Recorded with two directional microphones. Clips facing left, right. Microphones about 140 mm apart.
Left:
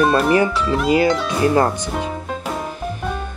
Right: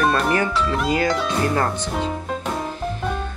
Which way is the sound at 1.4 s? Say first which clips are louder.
Left 7 dB; 20° left (ahead or behind).